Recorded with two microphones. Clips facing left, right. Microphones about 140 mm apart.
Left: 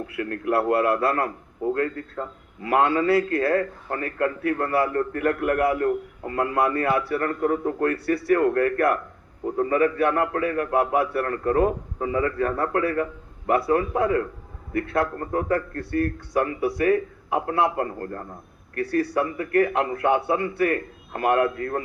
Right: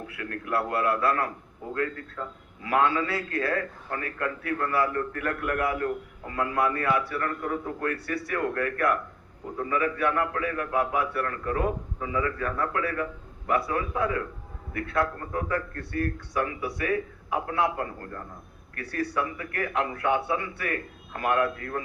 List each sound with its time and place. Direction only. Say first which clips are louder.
0.2 s a man's voice: left 6 dB; 35° left (ahead or behind)